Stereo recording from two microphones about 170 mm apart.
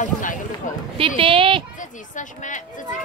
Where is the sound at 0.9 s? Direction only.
30° right (ahead or behind).